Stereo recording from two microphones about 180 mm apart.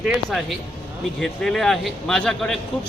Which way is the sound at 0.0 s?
Centre (ahead or behind).